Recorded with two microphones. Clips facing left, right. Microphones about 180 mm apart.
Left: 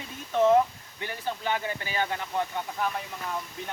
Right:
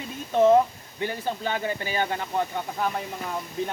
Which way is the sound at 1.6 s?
30° right (ahead or behind).